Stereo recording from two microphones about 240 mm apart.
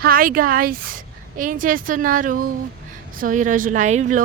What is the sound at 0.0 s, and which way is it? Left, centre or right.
Speech, right.